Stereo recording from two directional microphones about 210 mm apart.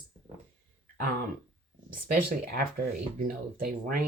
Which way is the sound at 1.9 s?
40° right (ahead or behind).